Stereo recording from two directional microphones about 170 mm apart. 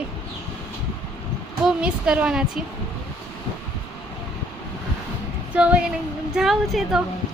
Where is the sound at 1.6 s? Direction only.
5° right (ahead or behind).